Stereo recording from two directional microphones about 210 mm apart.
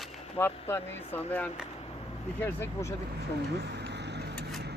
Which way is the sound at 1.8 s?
30° left (ahead or behind).